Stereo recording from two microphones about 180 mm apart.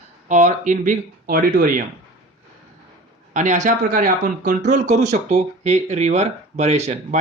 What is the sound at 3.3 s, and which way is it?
Speech, 45° right (ahead or behind).